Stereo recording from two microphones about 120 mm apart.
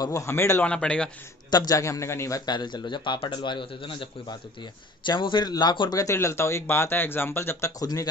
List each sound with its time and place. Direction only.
0.0 s speech: 25° left (ahead or behind)
0.7 s a man's voice: 10° left (ahead or behind)
1.5 s a man's voice: 30° left (ahead or behind)
7.8 s a man's voice: 30° left (ahead or behind)